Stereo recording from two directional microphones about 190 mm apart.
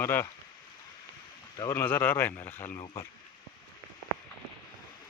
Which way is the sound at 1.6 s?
15° left (ahead or behind).